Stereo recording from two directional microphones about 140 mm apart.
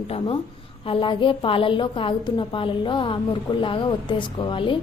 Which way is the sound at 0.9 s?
40° left (ahead or behind).